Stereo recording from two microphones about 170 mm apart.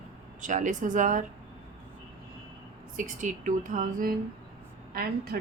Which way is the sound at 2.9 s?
50° right (ahead or behind).